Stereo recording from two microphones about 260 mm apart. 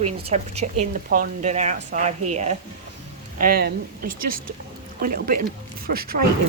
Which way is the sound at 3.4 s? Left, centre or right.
Right.